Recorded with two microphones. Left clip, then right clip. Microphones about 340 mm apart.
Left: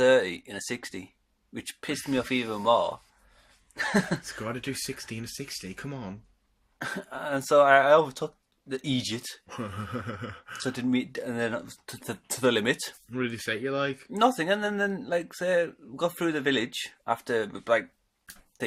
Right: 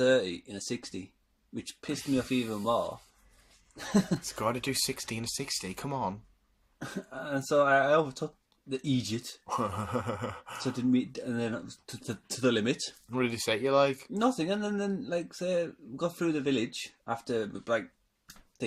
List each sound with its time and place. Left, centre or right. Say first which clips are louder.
0.0 s speech: left 5 dB; left
2.1 s speech: left 3 dB; left
4.2 s speech: right 3 dB; centre
7.1 s speech: left 5 dB; left
9.5 s speech: right 6 dB; centre
10.6 s speech: left 1 dB; left
10.9 s speech: left 2 dB; left
13.1 s speech: right 1 dB; centre
14.2 s speech: left 7 dB; left